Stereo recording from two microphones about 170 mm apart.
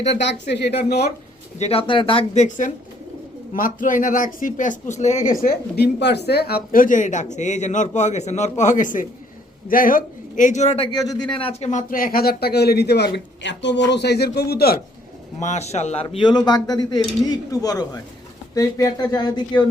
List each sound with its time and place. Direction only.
0.0 s speech: 90° left
0.9 s speech: 70° left (ahead or behind)
1.5 s speech: 35° left (ahead or behind)
2.3 s speech: 45° left (ahead or behind)
10.9 s speech: 20° left (ahead or behind)
11.7 s speech: 50° left (ahead or behind)
15.4 s speech: 40° left (ahead or behind)
16.0 s speech: 25° left (ahead or behind)